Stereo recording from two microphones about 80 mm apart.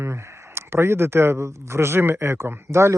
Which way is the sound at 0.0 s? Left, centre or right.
Right.